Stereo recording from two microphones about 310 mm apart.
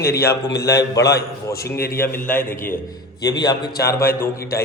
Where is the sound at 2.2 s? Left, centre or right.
Centre.